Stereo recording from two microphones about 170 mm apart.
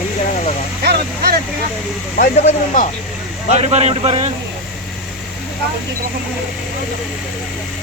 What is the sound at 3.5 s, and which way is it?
Speech, 40° right (ahead or behind).